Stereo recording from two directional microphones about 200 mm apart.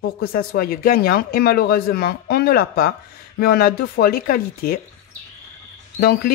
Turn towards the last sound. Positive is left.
turn(degrees=50)  # may be behind; listen again after turning